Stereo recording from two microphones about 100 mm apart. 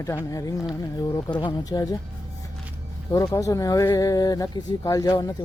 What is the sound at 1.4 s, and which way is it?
Speech, 45° left (ahead or behind).